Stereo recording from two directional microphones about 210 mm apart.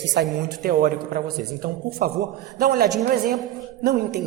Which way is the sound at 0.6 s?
45° right (ahead or behind).